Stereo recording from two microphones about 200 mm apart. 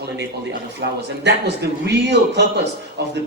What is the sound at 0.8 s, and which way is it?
A man's voice, 60° right (ahead or behind).